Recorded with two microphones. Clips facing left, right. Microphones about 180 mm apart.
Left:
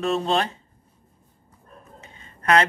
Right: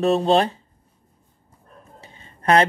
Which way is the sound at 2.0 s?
35° right (ahead or behind).